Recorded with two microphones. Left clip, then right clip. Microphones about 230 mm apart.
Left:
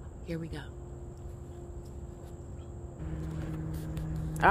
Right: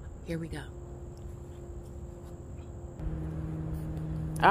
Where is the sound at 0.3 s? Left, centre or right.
Centre.